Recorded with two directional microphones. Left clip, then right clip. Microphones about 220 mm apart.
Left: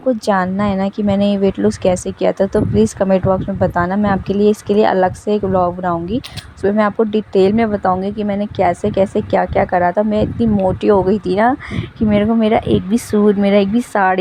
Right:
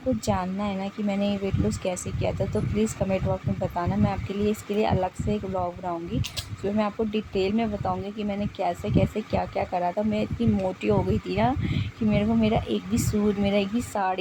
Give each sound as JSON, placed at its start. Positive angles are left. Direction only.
{"t": 0.3, "sound": "speech", "side_deg": 40}